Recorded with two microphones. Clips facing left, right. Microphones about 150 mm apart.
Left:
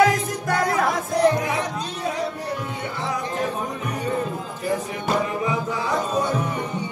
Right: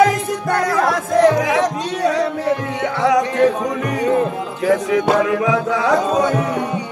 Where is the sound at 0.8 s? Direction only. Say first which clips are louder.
Right 8 dB; 90° right.